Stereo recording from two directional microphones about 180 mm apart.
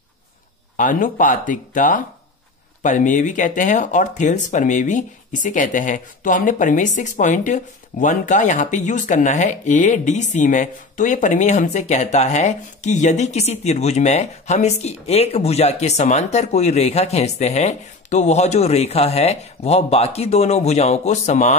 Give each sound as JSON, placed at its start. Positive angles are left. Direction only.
{"t": 0.7, "sound": "speech", "side_deg": 50}